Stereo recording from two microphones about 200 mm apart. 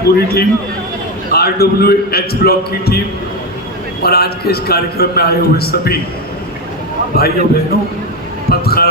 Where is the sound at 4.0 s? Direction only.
50° left (ahead or behind).